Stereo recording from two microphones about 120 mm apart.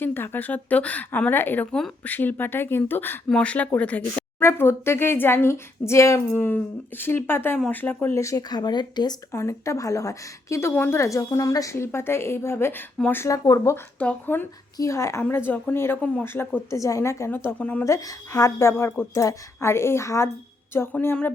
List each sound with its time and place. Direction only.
0.0 s speech: 20° left (ahead or behind); by 9.1 s 35° left (ahead or behind)
9.3 s speech: 25° left (ahead or behind)
13.7 s speech: 15° left (ahead or behind)
17.8 s speech: 25° left (ahead or behind)